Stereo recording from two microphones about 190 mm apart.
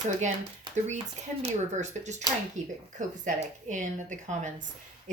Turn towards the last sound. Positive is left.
turn(degrees=-40)  # may be behind; listen again after turning